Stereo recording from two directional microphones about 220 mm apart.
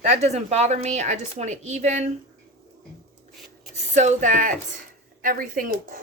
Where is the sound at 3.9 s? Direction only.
30° right (ahead or behind).